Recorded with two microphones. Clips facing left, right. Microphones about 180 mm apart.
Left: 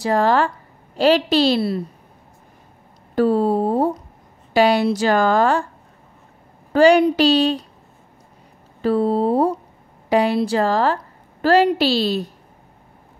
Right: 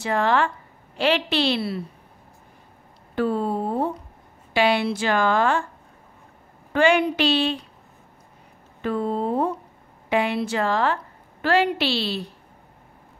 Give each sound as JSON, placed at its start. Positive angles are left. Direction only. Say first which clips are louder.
{"t": 0.0, "sound": "a woman's voice", "louder": "left 4 dB", "side_deg": 35}
{"t": 3.2, "sound": "a sound", "louder": "left 6 dB", "side_deg": 35}
{"t": 4.6, "sound": "a woman's voice", "louder": "left 5 dB", "side_deg": 40}
{"t": 6.7, "sound": "a woman's voice", "louder": "left 6 dB", "side_deg": 35}
{"t": 8.8, "sound": "a woman's voice", "louder": "left 7 dB", "side_deg": 35}